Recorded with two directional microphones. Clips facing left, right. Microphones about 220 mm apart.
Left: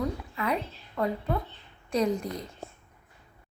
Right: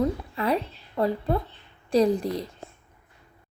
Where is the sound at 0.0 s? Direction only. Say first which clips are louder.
Right 5 dB; 35° right (ahead or behind).